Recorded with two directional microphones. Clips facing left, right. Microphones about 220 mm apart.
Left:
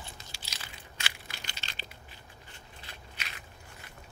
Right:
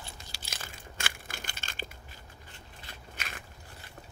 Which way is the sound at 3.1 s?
50° right (ahead or behind).